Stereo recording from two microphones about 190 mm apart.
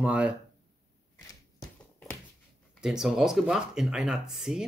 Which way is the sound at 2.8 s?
5° right (ahead or behind).